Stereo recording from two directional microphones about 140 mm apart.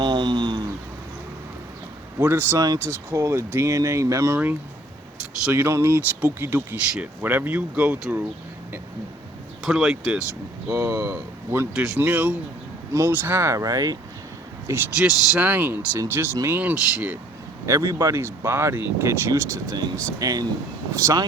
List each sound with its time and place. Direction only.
0.0 s a sound: 30° right (ahead or behind)
2.1 s speech: 15° right (ahead or behind)
9.6 s speech: 5° right (ahead or behind)
10.7 s speech: 25° right (ahead or behind)
11.7 s speech: 10° right (ahead or behind); by 14.0 s 25° right (ahead or behind)
14.9 s speech: 5° right (ahead or behind); by 21.2 s 25° right (ahead or behind)